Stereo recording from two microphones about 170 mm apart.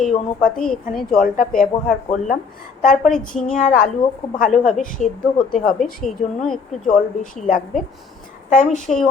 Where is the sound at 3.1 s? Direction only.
5° left (ahead or behind).